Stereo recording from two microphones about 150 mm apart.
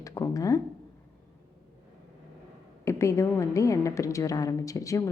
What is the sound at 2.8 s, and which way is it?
A woman's voice, 20° left (ahead or behind).